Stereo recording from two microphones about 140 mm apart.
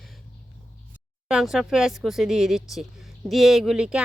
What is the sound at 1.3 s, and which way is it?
Speech, 5° right (ahead or behind).